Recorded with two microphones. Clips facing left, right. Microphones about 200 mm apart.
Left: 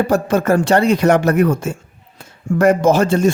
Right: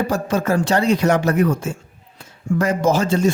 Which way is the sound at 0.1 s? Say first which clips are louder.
Left 5 dB; 60° left (ahead or behind).